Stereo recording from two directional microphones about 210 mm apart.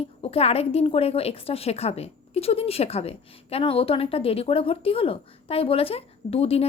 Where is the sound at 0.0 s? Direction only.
30° left (ahead or behind).